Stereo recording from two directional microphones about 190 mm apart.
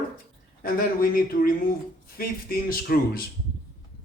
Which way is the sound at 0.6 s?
50° left (ahead or behind).